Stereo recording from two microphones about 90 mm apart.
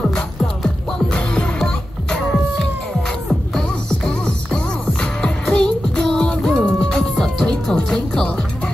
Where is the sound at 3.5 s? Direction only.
5° left (ahead or behind).